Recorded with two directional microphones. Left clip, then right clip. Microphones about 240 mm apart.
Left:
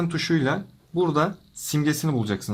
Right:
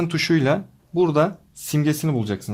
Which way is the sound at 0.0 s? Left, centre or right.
Right.